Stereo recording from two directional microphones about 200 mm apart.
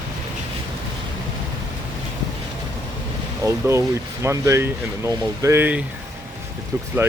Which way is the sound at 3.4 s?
15° right (ahead or behind).